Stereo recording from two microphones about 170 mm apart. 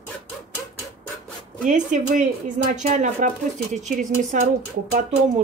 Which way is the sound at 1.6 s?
50° right (ahead or behind).